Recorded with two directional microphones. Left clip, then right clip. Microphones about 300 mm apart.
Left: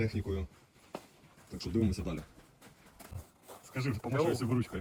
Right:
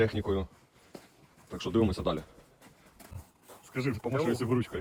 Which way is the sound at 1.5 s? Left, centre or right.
Centre.